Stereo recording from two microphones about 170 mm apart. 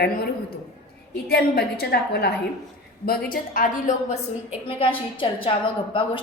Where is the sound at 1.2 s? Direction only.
65° left (ahead or behind).